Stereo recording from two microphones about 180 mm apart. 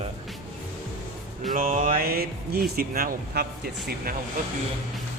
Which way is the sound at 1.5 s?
45° right (ahead or behind).